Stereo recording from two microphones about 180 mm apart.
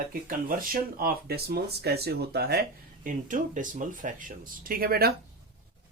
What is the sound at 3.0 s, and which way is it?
Speech, 45° right (ahead or behind).